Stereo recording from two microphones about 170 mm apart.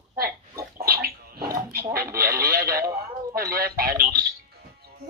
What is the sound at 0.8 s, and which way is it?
Bathtub, 65° right (ahead or behind).